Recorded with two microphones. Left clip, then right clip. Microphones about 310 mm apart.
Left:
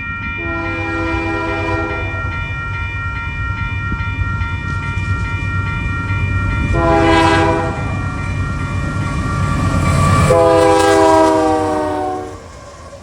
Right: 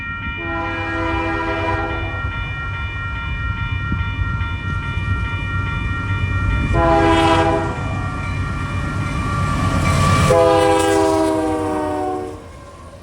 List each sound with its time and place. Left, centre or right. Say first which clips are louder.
1.0 s train: left 2 dB; centre
6.7 s train: left 1 dB; centre
7.1 s train: left 3 dB; centre
9.5 s train: left 2 dB; centre; by 12.1 s left